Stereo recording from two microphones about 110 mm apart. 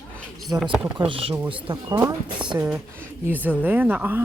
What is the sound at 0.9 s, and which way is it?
Speech, 50° right (ahead or behind).